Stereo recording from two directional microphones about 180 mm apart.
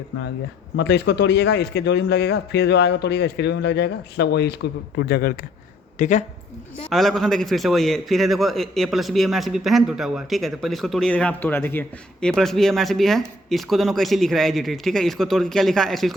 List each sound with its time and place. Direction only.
0.8 s a man's voice: 75° left (ahead or behind)
6.0 s speech: 45° left (ahead or behind)
6.9 s a man's voice: centre (ahead or behind)